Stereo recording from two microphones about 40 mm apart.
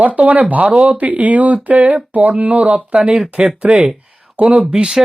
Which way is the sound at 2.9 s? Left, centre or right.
Right.